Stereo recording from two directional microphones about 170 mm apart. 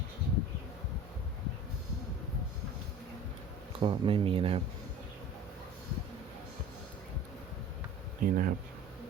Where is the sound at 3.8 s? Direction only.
30° right (ahead or behind).